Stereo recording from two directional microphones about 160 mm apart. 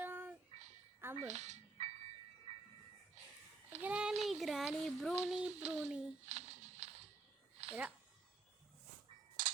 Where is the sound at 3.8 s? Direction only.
5° right (ahead or behind).